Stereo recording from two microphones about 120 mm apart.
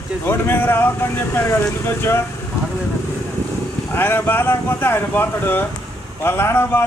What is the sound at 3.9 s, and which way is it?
Speech, 15° left (ahead or behind).